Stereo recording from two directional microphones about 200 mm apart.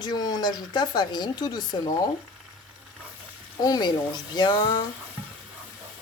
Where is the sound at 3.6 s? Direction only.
20° left (ahead or behind).